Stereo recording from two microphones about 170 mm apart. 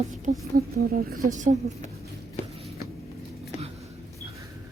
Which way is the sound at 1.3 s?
45° right (ahead or behind).